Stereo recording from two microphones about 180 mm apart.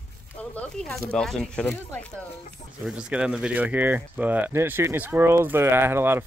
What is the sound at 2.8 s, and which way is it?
Speech, 5° right (ahead or behind).